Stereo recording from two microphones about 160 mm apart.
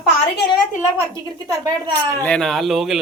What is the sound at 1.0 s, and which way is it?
A woman's voice, 20° right (ahead or behind).